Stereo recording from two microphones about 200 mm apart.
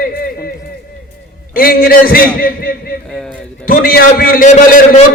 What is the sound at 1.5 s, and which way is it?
A man's voice, 45° left (ahead or behind).